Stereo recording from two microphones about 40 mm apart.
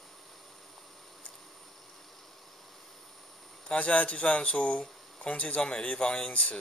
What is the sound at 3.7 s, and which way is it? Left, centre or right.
Speech, left.